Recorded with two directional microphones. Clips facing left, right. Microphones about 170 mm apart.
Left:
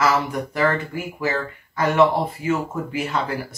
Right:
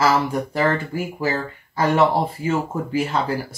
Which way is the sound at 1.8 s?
30° right (ahead or behind).